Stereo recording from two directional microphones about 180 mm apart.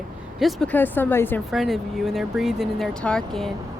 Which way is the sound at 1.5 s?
Centre (ahead or behind).